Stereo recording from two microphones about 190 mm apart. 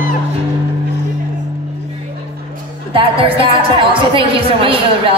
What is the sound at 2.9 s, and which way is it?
A woman's voice, 30° right (ahead or behind).